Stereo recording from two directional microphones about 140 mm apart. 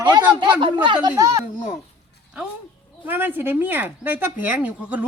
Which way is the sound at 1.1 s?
25° right (ahead or behind).